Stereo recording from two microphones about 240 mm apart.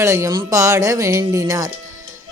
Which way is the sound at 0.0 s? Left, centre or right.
Centre.